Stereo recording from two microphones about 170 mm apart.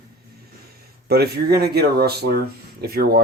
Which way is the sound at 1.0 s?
70° right (ahead or behind).